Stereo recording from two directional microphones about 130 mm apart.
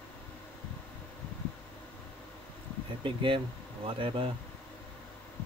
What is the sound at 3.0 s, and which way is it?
Speech, 40° right (ahead or behind).